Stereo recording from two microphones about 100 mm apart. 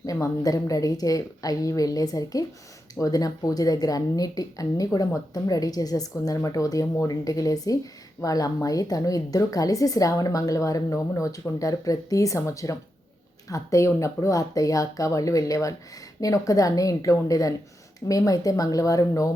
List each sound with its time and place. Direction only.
0.0 s speech: 35° left (ahead or behind)